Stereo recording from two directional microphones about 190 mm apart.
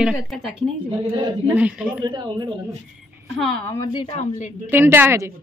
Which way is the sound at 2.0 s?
20° right (ahead or behind).